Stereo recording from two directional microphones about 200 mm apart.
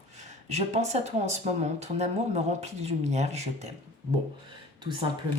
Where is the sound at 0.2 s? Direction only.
35° right (ahead or behind).